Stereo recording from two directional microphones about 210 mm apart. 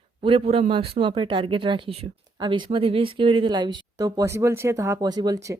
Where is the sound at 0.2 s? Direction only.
25° right (ahead or behind).